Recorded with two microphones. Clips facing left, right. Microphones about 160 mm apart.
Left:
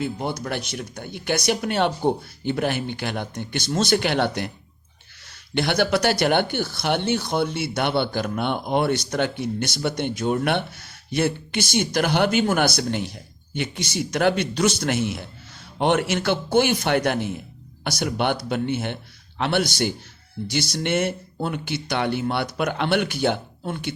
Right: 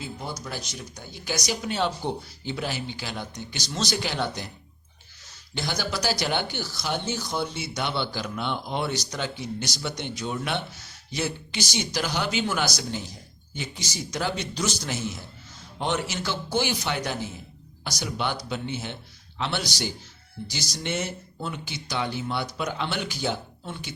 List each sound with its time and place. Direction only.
0.0 s speech: 65° left (ahead or behind)
5.5 s speech: 65° left (ahead or behind)